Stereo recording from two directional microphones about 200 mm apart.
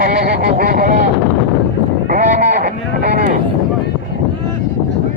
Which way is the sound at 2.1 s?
45° right (ahead or behind).